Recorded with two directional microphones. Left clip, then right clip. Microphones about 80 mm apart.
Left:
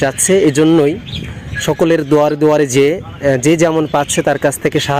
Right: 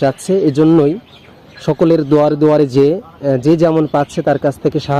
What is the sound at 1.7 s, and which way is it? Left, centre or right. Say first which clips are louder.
Speech: even; left.